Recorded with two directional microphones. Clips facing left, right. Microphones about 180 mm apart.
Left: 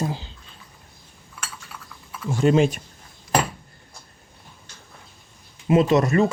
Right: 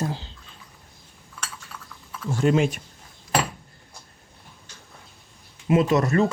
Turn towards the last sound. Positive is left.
turn(degrees=15)  # may be behind; listen again after turning